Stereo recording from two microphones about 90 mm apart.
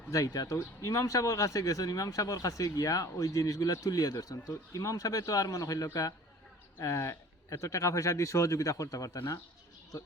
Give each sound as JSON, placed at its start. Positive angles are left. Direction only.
{"t": 0.1, "sound": "speech", "side_deg": 40}